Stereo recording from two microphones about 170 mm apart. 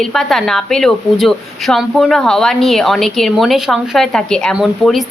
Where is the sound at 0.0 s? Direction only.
Centre (ahead or behind).